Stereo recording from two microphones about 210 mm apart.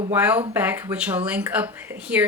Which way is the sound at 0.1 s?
5° right (ahead or behind).